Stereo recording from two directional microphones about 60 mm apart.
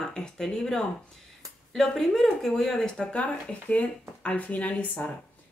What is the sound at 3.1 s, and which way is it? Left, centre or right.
Speech, left.